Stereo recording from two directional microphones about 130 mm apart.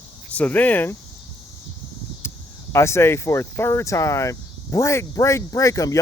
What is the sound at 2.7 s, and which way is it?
Speech, 20° left (ahead or behind).